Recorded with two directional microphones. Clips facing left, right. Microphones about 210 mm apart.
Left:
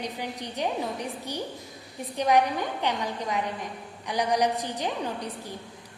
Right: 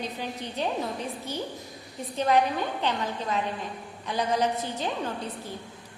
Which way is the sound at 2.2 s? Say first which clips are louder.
Left 1 dB; 15° left (ahead or behind).